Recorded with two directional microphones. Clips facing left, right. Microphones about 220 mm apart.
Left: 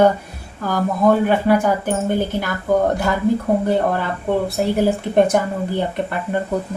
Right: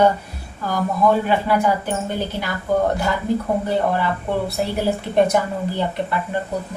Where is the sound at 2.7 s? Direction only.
50° left (ahead or behind).